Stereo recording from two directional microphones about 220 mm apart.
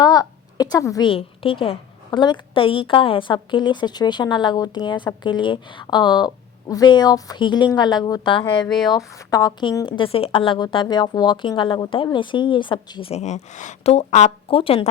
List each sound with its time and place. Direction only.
0.0 s a woman's voice: 15° left (ahead or behind)
8.6 s speech: centre (ahead or behind)
9.0 s a woman's voice: 15° left (ahead or behind)